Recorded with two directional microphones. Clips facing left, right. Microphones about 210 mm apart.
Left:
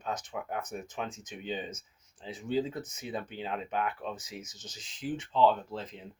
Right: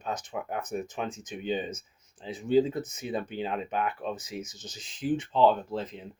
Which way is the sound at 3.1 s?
15° right (ahead or behind).